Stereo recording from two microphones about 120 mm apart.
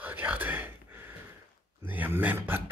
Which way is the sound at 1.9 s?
15° right (ahead or behind).